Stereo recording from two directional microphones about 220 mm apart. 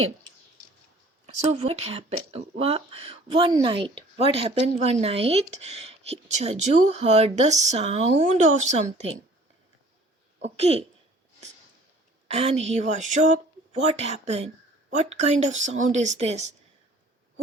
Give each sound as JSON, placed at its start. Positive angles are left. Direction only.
{"t": 1.5, "sound": "speech", "side_deg": -30}
{"t": 10.4, "sound": "speech", "side_deg": -30}
{"t": 12.3, "sound": "speech", "side_deg": -30}